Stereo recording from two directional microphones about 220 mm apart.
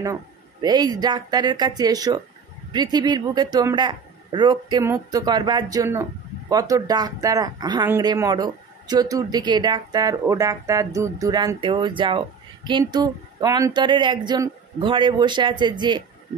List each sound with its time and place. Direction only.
0.0 s speech: 15° right (ahead or behind)